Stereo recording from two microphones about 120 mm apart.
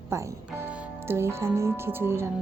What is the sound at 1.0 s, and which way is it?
Speech, 20° right (ahead or behind).